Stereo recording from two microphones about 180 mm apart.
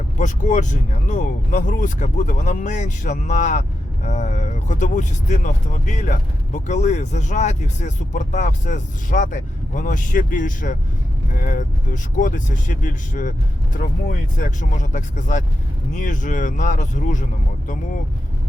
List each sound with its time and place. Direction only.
0.2 s speech: 45° left (ahead or behind)